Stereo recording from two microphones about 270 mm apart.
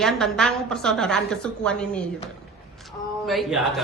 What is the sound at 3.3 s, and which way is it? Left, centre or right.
Speech, centre.